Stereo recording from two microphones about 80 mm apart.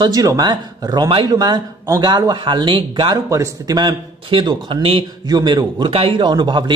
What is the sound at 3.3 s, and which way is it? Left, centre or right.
Speech, right.